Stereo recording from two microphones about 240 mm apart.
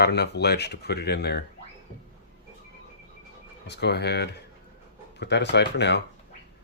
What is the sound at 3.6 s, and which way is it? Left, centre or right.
Speech, left.